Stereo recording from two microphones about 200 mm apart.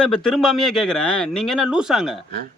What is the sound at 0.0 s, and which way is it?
Speech, 5° left (ahead or behind).